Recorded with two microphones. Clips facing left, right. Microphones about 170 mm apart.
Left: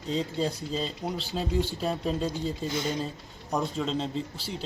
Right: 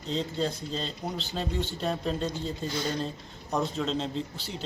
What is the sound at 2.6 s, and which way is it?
Speech, 20° left (ahead or behind).